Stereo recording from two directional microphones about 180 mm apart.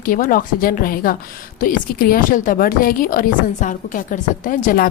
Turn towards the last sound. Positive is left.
turn(degrees=50)  # may be behind; listen again after turning